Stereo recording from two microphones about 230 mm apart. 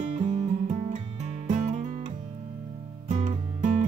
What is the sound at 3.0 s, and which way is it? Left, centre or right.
Music, right.